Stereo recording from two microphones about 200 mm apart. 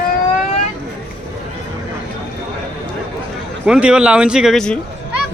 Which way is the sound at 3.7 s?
5° right (ahead or behind).